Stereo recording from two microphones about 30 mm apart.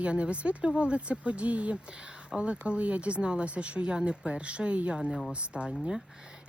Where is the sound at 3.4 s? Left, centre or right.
Right.